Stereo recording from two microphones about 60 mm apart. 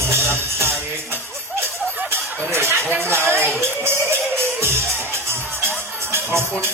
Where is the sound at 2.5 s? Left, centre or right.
Right.